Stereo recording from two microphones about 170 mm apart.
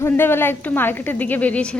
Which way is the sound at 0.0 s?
15° left (ahead or behind).